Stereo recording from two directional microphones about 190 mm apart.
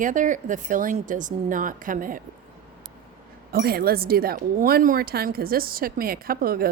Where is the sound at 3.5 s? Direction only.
55° right (ahead or behind).